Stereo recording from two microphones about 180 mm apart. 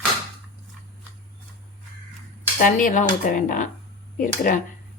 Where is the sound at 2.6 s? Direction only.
45° left (ahead or behind).